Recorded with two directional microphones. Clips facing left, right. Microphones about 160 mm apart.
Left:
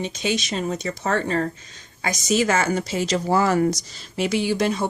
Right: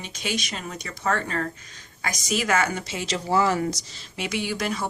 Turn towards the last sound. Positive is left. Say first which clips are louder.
# left 6 dB
turn(degrees=25)  # may be behind; listen again after turning